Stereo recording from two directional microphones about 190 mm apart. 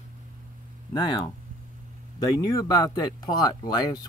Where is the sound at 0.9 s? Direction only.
20° left (ahead or behind).